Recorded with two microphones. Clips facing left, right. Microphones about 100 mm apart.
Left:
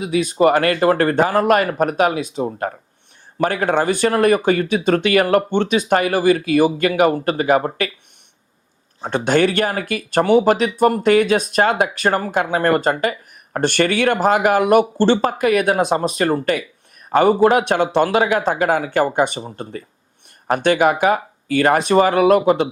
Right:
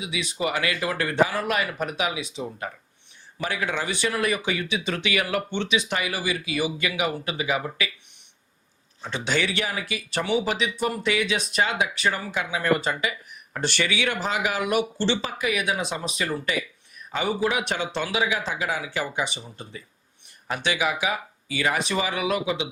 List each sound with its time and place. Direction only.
0.0 s speech: 45° left (ahead or behind)
9.0 s speech: 50° left (ahead or behind)